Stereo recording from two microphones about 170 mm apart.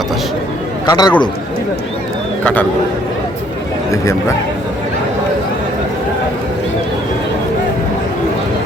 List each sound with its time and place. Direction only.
0.9 s speech: 25° left (ahead or behind)
2.4 s speech: 10° left (ahead or behind)